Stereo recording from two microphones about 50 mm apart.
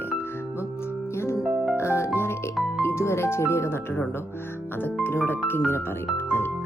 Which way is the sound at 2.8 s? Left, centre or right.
Left.